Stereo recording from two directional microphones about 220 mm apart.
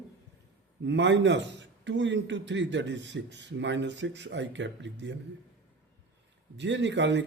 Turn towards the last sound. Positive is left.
turn(degrees=-55)  # may be behind; listen again after turning